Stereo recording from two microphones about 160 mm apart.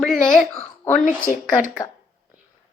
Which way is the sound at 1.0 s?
55° left (ahead or behind).